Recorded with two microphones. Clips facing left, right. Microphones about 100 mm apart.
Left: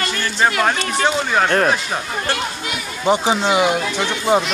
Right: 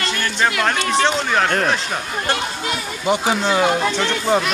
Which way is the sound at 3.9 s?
15° left (ahead or behind).